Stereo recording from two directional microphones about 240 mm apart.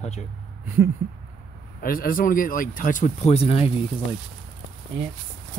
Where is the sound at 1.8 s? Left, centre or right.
Left.